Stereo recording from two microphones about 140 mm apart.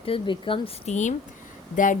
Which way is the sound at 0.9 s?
60° left (ahead or behind).